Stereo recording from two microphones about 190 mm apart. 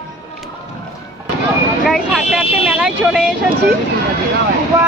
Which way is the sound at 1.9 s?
5° right (ahead or behind).